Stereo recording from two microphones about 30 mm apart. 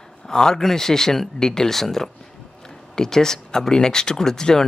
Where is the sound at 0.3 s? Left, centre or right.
Left.